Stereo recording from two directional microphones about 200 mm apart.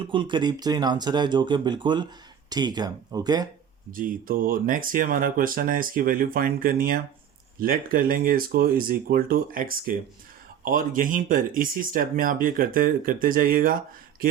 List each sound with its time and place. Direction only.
0.0 s speech: 25° right (ahead or behind)
3.9 s speech: 45° right (ahead or behind)